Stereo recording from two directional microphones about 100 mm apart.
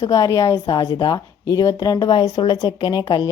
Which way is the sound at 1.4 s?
35° left (ahead or behind).